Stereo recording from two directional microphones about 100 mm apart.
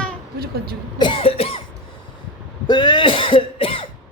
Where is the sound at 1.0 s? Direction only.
65° left (ahead or behind).